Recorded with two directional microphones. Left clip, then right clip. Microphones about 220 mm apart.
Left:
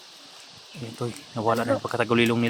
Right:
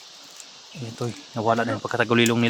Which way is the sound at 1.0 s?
10° right (ahead or behind).